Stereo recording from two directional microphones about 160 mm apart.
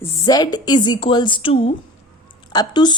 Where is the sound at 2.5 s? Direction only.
25° left (ahead or behind).